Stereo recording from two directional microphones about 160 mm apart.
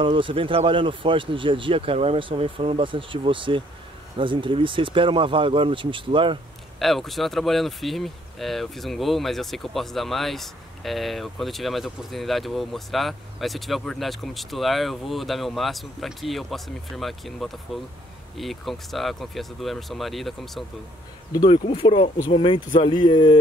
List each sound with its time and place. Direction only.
0.0 s speech: 30° right (ahead or behind)
6.8 s speech: centre (ahead or behind)
21.5 s speech: 35° left (ahead or behind)